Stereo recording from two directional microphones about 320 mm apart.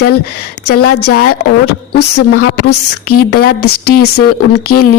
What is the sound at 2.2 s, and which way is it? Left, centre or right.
Speech, left.